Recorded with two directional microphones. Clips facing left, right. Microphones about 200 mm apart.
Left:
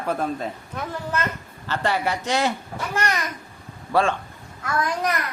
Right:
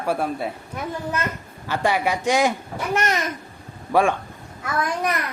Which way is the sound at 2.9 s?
20° right (ahead or behind).